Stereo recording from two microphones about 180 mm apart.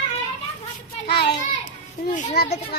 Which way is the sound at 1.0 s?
65° left (ahead or behind).